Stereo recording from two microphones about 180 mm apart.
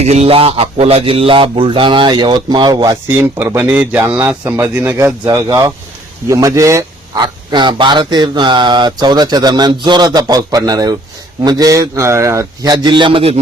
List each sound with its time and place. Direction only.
0.0 s speech: 35° right (ahead or behind)
3.1 s speech: 10° right (ahead or behind); by 13.4 s 30° right (ahead or behind)